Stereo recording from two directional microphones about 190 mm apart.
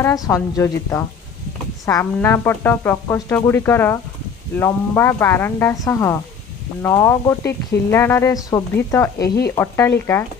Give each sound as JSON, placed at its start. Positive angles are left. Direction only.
{"t": 0.0, "sound": "speech", "side_deg": 15}